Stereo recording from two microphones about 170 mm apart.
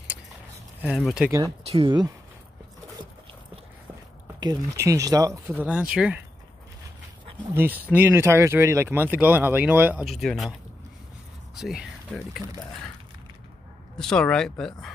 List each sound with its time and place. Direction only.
0.8 s speech: 5° right (ahead or behind)
1.6 s speech: 35° right (ahead or behind)
4.4 s speech: 20° right (ahead or behind)
7.5 s speech: 10° right (ahead or behind)
10.0 s speech: centre (ahead or behind)
11.5 s speech: centre (ahead or behind)
13.9 s speech: 5° left (ahead or behind)